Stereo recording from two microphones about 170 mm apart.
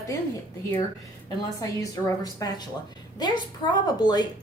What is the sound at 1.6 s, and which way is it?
A woman's voice, 20° left (ahead or behind).